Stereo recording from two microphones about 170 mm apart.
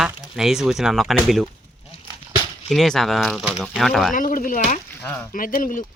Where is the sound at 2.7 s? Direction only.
Centre (ahead or behind).